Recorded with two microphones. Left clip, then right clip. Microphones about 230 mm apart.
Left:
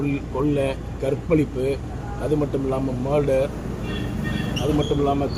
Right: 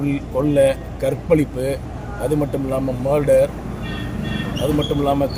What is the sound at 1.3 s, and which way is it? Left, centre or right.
Speech, right.